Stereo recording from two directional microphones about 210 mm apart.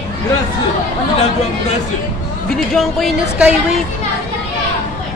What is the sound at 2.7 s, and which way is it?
Speech, centre (ahead or behind).